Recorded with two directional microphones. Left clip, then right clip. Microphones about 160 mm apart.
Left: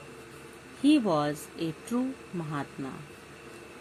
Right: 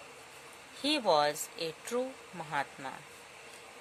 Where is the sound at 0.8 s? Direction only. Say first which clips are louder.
Left 3 dB; 35° right (ahead or behind).